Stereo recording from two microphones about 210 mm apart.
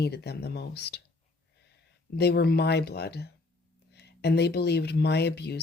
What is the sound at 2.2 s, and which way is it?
Speech, 50° left (ahead or behind).